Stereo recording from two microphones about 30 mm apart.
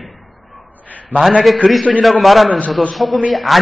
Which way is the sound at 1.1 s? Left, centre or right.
Right.